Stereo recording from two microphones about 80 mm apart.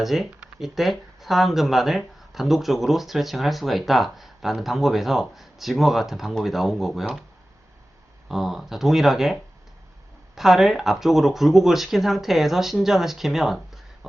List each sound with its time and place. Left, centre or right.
0.0 s speech: centre
8.3 s speech: centre